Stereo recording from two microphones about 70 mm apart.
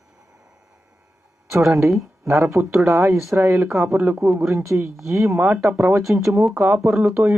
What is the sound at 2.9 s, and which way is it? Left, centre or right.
Speech, right.